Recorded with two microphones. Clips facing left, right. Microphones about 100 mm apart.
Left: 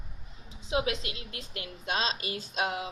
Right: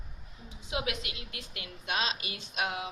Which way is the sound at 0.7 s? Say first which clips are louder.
Left 5 dB; 30° left (ahead or behind).